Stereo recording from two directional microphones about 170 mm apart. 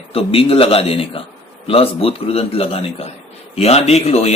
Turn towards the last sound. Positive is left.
turn(degrees=40)  # may be behind; listen again after turning